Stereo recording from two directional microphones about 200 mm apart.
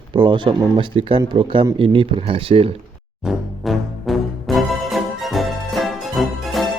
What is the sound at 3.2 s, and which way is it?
Music, centre (ahead or behind).